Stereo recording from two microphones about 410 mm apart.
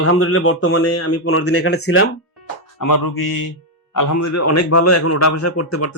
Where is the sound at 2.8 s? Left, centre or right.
Left.